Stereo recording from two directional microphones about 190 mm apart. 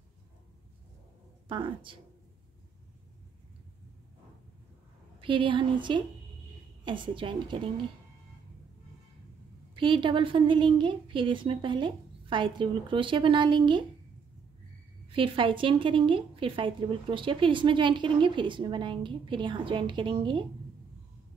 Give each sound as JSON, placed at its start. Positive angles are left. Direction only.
{"t": 1.5, "sound": "a woman's voice", "side_deg": -25}
{"t": 5.2, "sound": "a woman's voice", "side_deg": -25}
{"t": 9.8, "sound": "a woman's voice", "side_deg": -25}
{"t": 15.0, "sound": "a woman's voice", "side_deg": -25}